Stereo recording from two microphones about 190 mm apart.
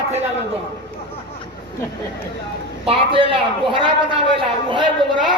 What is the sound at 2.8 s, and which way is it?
A man's voice, 25° right (ahead or behind).